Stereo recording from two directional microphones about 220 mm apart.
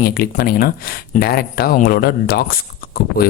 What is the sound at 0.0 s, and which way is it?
Speech, 45° left (ahead or behind).